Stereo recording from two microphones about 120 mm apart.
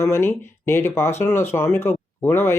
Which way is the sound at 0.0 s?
20° left (ahead or behind).